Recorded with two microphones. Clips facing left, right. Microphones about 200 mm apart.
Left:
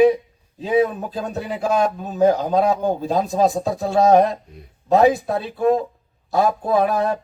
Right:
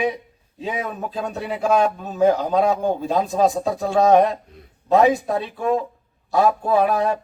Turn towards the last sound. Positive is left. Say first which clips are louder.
# even
turn(degrees=35)  # may be behind; listen again after turning